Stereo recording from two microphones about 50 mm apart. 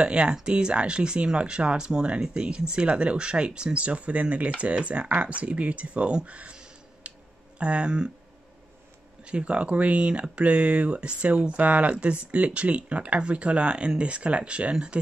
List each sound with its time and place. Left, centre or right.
0.0 s speech: right
9.2 s speech: right